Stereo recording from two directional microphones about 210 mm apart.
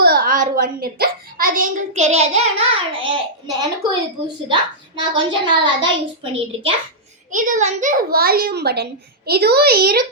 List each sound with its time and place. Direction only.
0.0 s a child's voice: 45° right (ahead or behind); by 3.2 s 25° right (ahead or behind)
4.4 s a child's voice: 20° right (ahead or behind)
7.3 s a child's voice: 40° right (ahead or behind)